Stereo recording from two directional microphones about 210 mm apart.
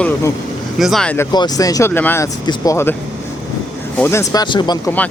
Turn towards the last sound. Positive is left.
turn(degrees=20)  # may be behind; listen again after turning